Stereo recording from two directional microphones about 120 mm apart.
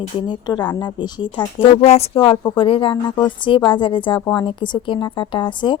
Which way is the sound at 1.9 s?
55° left (ahead or behind).